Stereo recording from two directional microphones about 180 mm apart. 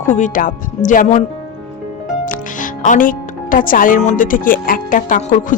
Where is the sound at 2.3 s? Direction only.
45° left (ahead or behind).